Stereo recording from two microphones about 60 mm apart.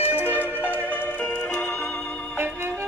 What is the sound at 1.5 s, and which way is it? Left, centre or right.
Music, centre.